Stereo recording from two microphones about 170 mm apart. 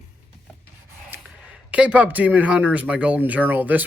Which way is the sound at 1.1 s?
10° right (ahead or behind).